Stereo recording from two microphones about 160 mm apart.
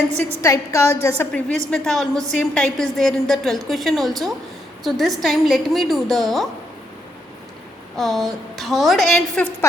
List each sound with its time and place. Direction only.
0.4 s a woman's voice: 20° left (ahead or behind)
1.3 s a woman's voice: 5° left (ahead or behind)
7.9 s a woman's voice: centre (ahead or behind)